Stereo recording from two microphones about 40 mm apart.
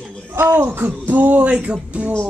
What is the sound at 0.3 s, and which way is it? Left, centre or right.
Speech, right.